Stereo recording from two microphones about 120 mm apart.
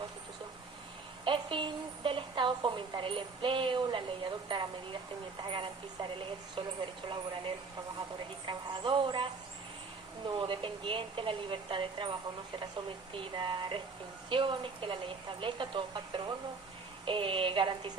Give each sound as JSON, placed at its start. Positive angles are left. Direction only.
{"t": 1.2, "sound": "a woman's voice", "side_deg": -45}
{"t": 8.4, "sound": "a woman's voice", "side_deg": -40}
{"t": 13.1, "sound": "a sound", "side_deg": -40}
{"t": 14.3, "sound": "a woman's voice", "side_deg": -45}